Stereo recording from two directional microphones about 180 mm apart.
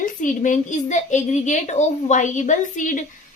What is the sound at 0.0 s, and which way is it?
A woman's voice, 45° left (ahead or behind).